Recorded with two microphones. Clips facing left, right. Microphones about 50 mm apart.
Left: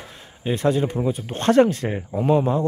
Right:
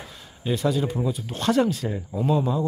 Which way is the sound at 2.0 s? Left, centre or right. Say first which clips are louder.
Left 4 dB; left.